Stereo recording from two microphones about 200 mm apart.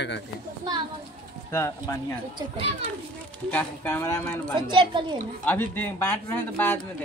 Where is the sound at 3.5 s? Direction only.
10° left (ahead or behind).